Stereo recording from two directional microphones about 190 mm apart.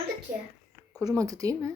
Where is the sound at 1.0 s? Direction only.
20° right (ahead or behind).